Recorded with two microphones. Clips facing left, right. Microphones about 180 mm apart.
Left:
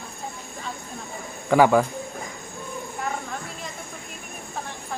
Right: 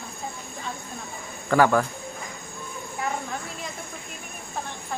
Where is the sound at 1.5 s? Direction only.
15° left (ahead or behind).